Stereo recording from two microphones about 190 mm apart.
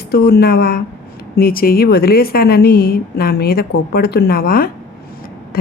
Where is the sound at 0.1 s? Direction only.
55° left (ahead or behind).